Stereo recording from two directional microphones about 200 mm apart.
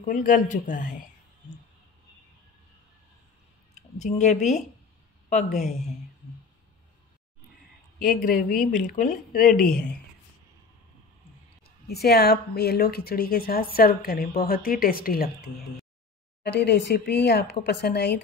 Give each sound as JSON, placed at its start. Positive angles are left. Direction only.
{"t": 0.0, "sound": "a man's voice", "side_deg": 40}
{"t": 4.0, "sound": "a man's voice", "side_deg": 35}
{"t": 8.2, "sound": "a woman's voice", "side_deg": 45}
{"t": 9.6, "sound": "speech", "side_deg": 5}
{"t": 11.9, "sound": "a woman's voice", "side_deg": 55}
{"t": 16.5, "sound": "speech", "side_deg": 55}